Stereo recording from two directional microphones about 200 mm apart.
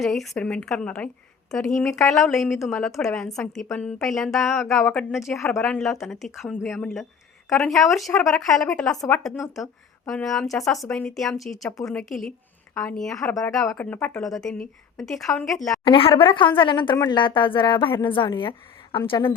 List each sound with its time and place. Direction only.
0.0 s a woman's voice: centre (ahead or behind)
12.8 s a woman's voice: centre (ahead or behind)
15.8 s a woman's voice: 25° left (ahead or behind)